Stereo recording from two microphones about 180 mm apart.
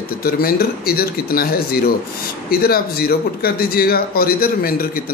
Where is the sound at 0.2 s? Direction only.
55° left (ahead or behind).